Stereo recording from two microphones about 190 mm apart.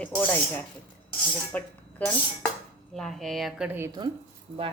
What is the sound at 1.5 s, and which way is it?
Dishes, 10° left (ahead or behind).